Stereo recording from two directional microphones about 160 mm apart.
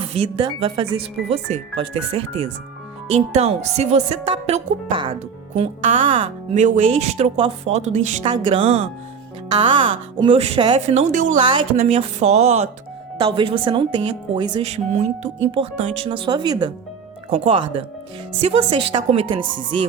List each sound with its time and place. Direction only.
0.1 s speech: 40° right (ahead or behind)
5.5 s speech: 50° right (ahead or behind)
8.3 s speech: 30° right (ahead or behind)
9.7 s speech: 30° right (ahead or behind); by 11.3 s 50° right (ahead or behind)
11.4 s speech: 30° right (ahead or behind)
11.9 s speech: 45° right (ahead or behind)
13.1 s speech: 30° right (ahead or behind)
14.6 s speech: 45° right (ahead or behind); by 16.7 s 25° right (ahead or behind)
17.2 s speech: 35° right (ahead or behind)